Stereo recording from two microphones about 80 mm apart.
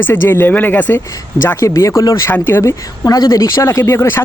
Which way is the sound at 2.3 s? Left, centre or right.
Left.